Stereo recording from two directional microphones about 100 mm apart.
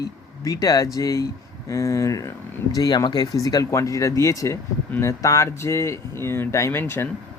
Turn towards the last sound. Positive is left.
turn(degrees=25)  # may be behind; listen again after turning